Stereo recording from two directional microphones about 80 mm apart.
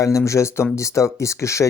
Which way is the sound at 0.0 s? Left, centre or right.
Left.